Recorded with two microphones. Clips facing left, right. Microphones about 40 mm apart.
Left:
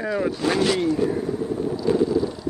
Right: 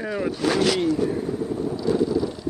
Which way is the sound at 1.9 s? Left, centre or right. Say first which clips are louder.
Left 2 dB; left.